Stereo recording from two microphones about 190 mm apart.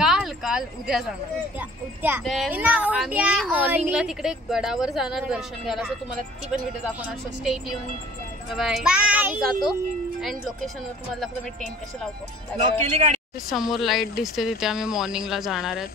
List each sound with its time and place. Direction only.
0.0 s speech: centre (ahead or behind)
2.2 s a woman's voice: centre (ahead or behind)
7.0 s a woman's voice: 5° right (ahead or behind)
12.8 s speech: 35° right (ahead or behind)
13.5 s a woman's voice: centre (ahead or behind)